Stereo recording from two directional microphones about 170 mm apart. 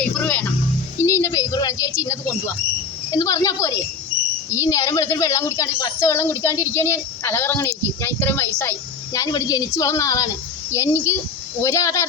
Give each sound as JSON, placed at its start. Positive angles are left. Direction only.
{"t": 0.0, "sound": "music", "side_deg": 10}
{"t": 1.0, "sound": "a sound", "side_deg": 15}
{"t": 3.1, "sound": "a woman's voice", "side_deg": 20}